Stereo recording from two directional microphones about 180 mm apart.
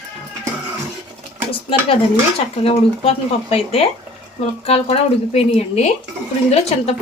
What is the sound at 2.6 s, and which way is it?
Speech, 35° left (ahead or behind).